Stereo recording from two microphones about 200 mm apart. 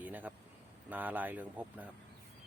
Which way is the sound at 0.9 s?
10° right (ahead or behind).